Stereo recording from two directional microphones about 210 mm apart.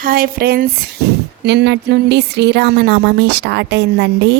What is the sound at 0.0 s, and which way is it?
Speech, 45° right (ahead or behind).